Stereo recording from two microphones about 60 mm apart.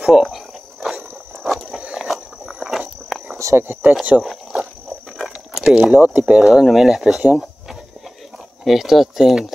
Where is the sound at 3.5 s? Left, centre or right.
Right.